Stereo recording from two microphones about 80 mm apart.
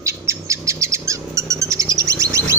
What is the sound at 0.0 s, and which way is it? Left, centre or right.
Bird, right.